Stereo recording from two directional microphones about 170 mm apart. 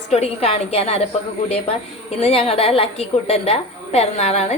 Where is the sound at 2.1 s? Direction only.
35° left (ahead or behind).